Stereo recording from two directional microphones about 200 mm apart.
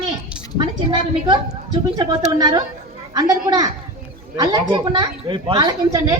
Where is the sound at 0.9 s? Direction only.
25° right (ahead or behind).